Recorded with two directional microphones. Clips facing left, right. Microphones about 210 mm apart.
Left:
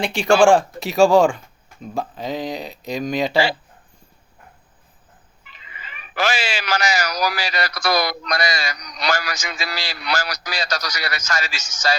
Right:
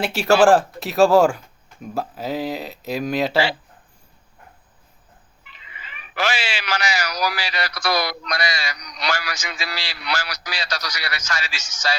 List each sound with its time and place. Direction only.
0.0 s speech: 5° right (ahead or behind)
5.5 s speech: 40° left (ahead or behind)